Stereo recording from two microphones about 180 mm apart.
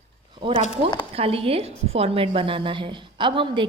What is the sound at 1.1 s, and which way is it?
A woman's voice, 30° right (ahead or behind).